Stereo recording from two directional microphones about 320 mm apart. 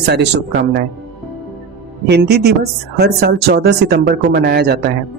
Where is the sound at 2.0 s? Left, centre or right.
Right.